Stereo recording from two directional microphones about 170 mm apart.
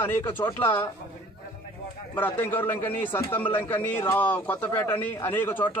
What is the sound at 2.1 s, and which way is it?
Speech, 10° left (ahead or behind).